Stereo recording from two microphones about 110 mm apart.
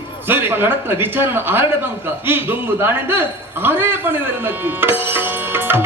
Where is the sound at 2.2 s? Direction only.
20° right (ahead or behind).